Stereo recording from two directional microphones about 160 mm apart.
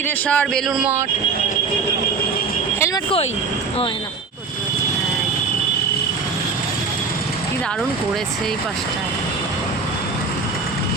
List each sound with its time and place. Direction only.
0.3 s speech: 5° left (ahead or behind)
0.8 s speech: 10° right (ahead or behind)